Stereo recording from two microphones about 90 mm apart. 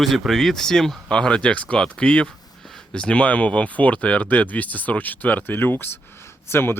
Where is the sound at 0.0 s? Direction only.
Centre (ahead or behind).